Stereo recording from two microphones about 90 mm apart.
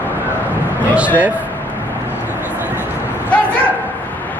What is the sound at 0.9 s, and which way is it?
Speech, 15° right (ahead or behind).